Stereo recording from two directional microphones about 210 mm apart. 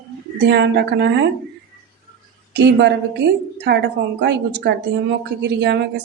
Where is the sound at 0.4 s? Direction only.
55° right (ahead or behind).